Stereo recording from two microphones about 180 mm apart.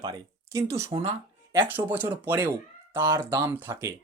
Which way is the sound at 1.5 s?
10° right (ahead or behind).